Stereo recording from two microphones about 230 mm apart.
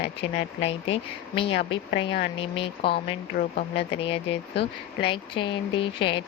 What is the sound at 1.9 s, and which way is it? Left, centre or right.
Speech, left.